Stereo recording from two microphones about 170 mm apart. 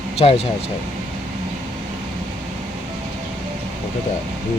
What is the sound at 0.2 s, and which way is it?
Speech, 35° left (ahead or behind).